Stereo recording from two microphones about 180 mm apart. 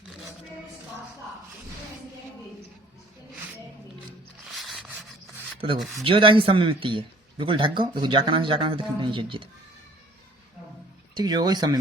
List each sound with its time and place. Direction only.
4.5 s scrape: centre (ahead or behind)
5.5 s a man's voice: 30° right (ahead or behind)
11.1 s a man's voice: 20° right (ahead or behind)